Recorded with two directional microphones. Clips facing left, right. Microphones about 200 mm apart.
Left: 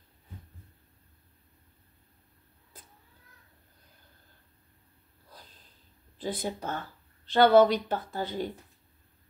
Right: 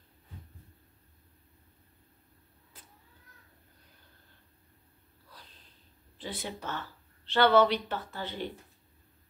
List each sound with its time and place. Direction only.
6.2 s speech: 45° left (ahead or behind)